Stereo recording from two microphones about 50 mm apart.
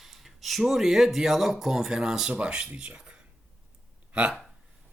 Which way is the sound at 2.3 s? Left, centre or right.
Right.